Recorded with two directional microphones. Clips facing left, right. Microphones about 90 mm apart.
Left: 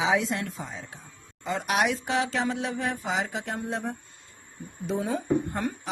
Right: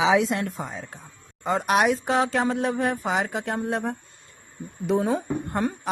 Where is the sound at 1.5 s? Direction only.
40° right (ahead or behind); by 3.9 s 60° right (ahead or behind).